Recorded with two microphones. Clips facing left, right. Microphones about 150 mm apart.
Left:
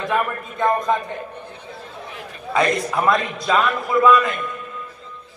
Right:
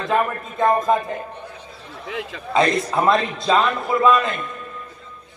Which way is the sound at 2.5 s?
25° right (ahead or behind).